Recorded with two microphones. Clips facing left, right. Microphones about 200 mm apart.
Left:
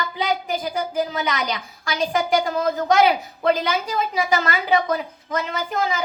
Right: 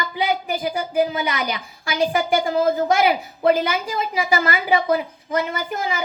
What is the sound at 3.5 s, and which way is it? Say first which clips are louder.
A woman's voice: right 1 dB; 10° right (ahead or behind).